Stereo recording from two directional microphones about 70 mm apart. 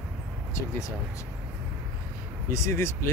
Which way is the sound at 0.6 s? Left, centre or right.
Left.